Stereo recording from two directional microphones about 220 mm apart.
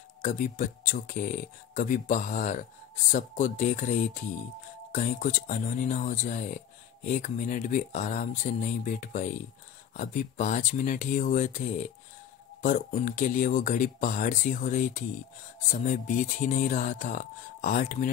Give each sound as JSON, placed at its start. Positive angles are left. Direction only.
{"t": 0.2, "sound": "speech", "side_deg": 35}
{"t": 12.6, "sound": "speech", "side_deg": 35}